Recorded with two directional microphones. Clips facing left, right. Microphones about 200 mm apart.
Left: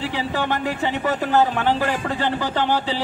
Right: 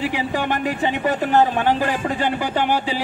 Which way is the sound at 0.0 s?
15° right (ahead or behind).